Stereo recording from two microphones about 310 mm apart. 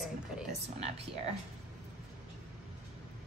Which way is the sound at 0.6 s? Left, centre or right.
Centre.